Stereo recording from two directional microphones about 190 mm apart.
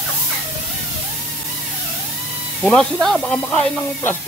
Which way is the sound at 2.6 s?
Centre (ahead or behind).